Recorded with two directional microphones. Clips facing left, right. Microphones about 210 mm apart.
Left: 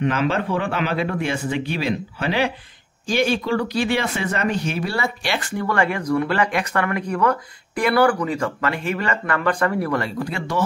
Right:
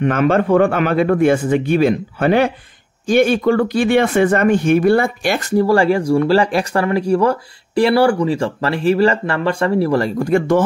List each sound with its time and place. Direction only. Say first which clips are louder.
0.0 s speech: right 6 dB; 50° right (ahead or behind)